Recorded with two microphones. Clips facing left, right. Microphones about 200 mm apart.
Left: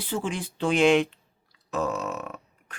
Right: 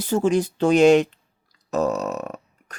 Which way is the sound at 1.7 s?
40° right (ahead or behind).